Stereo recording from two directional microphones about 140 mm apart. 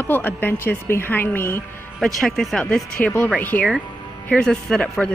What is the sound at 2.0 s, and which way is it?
Speech, 5° left (ahead or behind).